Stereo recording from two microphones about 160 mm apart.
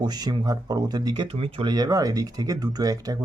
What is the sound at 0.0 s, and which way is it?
Speech, 25° right (ahead or behind).